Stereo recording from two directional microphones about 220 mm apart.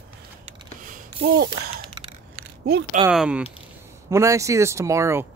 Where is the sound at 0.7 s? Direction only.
35° right (ahead or behind).